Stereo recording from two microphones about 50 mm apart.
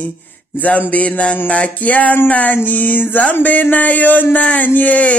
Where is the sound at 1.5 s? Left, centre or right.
Left.